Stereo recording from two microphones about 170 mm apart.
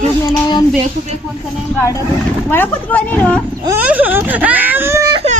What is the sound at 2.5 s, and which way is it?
Speech, 10° left (ahead or behind).